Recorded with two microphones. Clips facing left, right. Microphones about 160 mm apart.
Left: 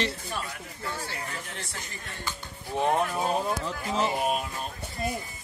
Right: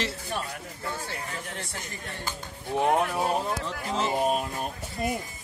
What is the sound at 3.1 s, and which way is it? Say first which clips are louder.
Speech: even; 5° right (ahead or behind).